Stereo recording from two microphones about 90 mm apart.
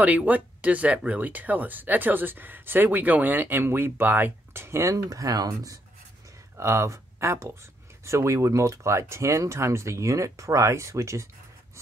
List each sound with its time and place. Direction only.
0.0 s speech: 15° right (ahead or behind); by 5.8 s 45° right (ahead or behind)
6.5 s speech: 30° right (ahead or behind)